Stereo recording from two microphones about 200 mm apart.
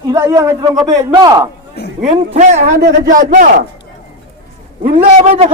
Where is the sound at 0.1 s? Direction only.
15° right (ahead or behind).